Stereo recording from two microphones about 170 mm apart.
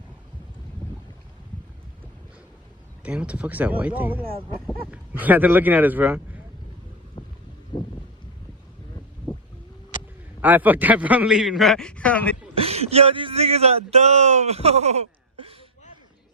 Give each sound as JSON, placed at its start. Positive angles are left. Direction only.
{"t": 3.0, "sound": "speech", "side_deg": -5}
{"t": 7.2, "sound": "boat", "side_deg": 30}
{"t": 7.7, "sound": "a sound", "side_deg": 25}
{"t": 10.4, "sound": "a man's voice", "side_deg": -10}
{"t": 12.5, "sound": "speech", "side_deg": -35}